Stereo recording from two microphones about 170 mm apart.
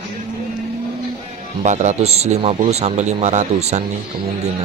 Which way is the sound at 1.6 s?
45° right (ahead or behind).